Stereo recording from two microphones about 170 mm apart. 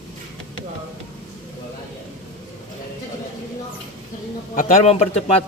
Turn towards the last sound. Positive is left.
turn(degrees=35)  # may be behind; listen again after turning